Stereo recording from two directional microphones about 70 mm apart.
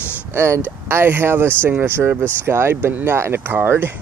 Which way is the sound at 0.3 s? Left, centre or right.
Right.